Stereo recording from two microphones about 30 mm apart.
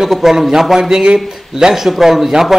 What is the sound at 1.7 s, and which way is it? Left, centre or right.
Speech, centre.